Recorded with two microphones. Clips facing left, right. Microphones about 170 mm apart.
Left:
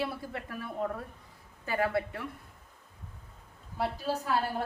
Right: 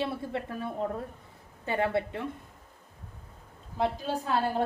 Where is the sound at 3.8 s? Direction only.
20° right (ahead or behind).